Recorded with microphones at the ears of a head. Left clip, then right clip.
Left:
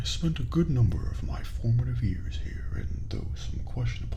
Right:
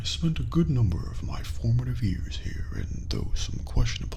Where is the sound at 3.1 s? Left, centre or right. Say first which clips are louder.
Right 8 dB; right.